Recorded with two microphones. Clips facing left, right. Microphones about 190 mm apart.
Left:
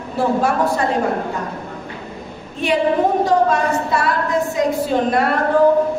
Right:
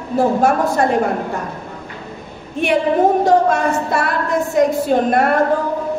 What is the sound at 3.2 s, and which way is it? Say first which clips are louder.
A woman's voice: right 2 dB; 55° right (ahead or behind).